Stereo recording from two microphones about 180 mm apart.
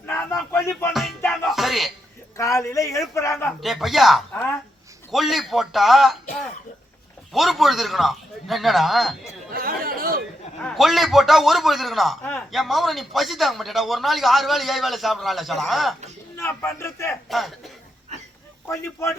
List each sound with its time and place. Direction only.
0.5 s music: 15° left (ahead or behind)
1.2 s music: centre (ahead or behind)
2.4 s a man's voice: 15° left (ahead or behind)
3.6 s speech: centre (ahead or behind)
9.5 s chatter: 55° right (ahead or behind)
10.6 s speech: centre (ahead or behind)
16.4 s a man's voice: 10° left (ahead or behind)
17.2 s speech: centre (ahead or behind)
18.6 s a man's voice: 15° left (ahead or behind)